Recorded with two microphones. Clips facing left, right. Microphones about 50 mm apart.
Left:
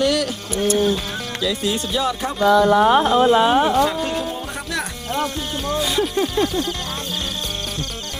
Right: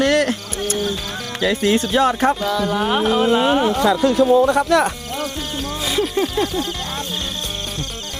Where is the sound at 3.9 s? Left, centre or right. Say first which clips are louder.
Right 9 dB; right.